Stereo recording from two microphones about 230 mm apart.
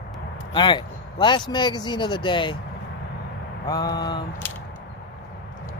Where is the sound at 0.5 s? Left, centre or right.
Centre.